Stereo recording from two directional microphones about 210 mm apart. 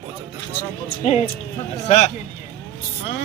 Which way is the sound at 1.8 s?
35° left (ahead or behind).